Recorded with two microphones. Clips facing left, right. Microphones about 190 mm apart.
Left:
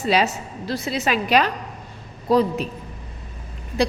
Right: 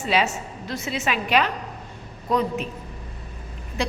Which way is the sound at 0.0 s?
35° left (ahead or behind).